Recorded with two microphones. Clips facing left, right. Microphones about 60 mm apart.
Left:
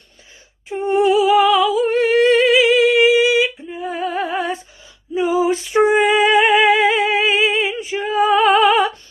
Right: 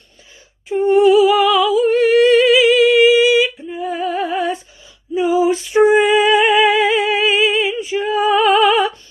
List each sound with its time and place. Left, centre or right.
0.7 s humming: left
5.1 s music: left
7.9 s female singing: left
8.3 s music: left
8.6 s a sound: left